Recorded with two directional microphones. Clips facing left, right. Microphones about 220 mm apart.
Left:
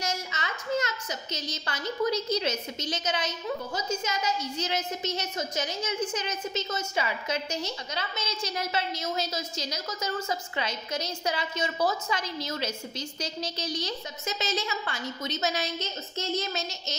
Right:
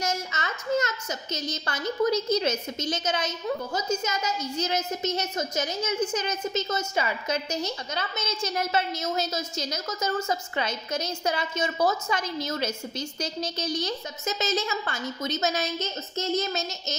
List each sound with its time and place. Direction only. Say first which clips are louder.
0.0 s a child's voice: right 3 dB; 45° right (ahead or behind)